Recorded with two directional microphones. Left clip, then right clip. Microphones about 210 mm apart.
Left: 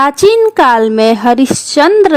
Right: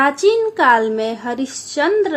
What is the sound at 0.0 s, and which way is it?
A woman's voice, 55° left (ahead or behind).